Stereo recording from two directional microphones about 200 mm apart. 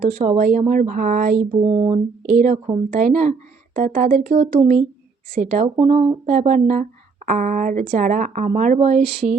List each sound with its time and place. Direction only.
0.2 s speech: 35° right (ahead or behind)
1.6 s speech: 30° right (ahead or behind)
2.2 s speech: 45° right (ahead or behind)
5.6 s speech: 30° right (ahead or behind)